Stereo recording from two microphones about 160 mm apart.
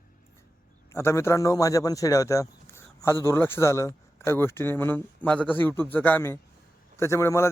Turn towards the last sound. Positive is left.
turn(degrees=15)  # may be behind; listen again after turning